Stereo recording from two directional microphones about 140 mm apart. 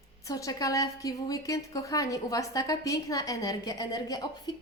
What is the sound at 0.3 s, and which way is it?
A woman's voice, 25° left (ahead or behind).